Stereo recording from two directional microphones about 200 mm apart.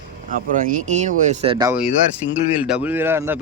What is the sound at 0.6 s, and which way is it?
Speech, 40° right (ahead or behind).